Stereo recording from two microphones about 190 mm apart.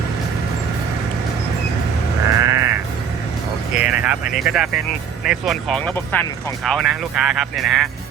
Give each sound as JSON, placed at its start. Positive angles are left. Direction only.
{"t": 2.4, "sound": "sheep", "side_deg": -15}
{"t": 3.8, "sound": "music", "side_deg": -5}
{"t": 5.2, "sound": "speech", "side_deg": 0}